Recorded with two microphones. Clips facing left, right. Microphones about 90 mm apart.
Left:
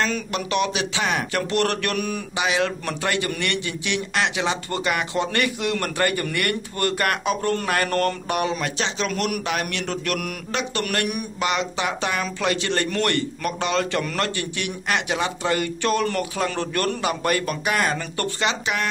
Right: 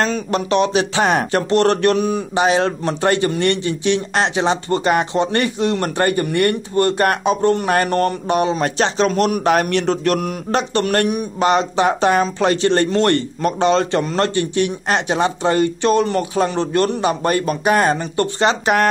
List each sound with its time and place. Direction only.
0.0 s a man's voice: 35° right (ahead or behind)
2.3 s a man's voice: 35° right (ahead or behind)
18.4 s speech: 45° right (ahead or behind)